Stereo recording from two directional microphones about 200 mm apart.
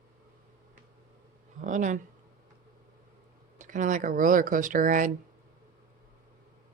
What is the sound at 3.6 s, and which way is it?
Speech, 40° right (ahead or behind).